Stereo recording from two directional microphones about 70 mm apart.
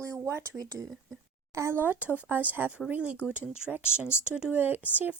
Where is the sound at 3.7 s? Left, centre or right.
Right.